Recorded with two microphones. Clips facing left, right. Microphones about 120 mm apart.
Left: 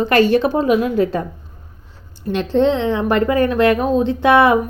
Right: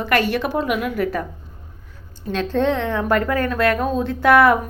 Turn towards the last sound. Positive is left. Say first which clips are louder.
# left 1 dB
turn(degrees=20)  # may be behind; listen again after turning